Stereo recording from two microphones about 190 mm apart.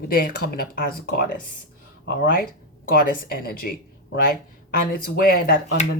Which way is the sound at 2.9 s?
50° left (ahead or behind).